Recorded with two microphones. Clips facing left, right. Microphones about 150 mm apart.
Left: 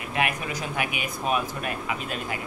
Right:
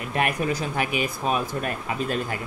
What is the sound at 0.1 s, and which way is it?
Speech, 40° right (ahead or behind).